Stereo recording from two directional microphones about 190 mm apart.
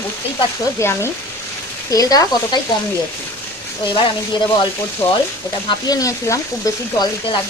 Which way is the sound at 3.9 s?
25° left (ahead or behind).